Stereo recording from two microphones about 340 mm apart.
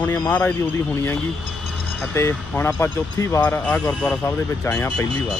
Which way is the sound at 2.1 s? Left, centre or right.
Centre.